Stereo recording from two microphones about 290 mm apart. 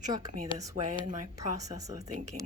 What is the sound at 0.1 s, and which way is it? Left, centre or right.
Speech, centre.